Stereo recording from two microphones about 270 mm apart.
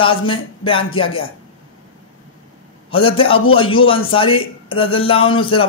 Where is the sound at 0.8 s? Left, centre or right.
Centre.